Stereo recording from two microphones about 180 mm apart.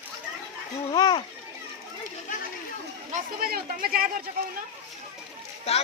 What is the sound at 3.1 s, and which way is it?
Speech, 55° right (ahead or behind).